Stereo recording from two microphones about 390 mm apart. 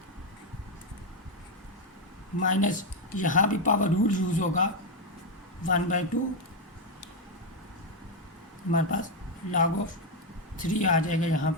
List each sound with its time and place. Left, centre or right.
2.4 s speech: centre
8.7 s speech: centre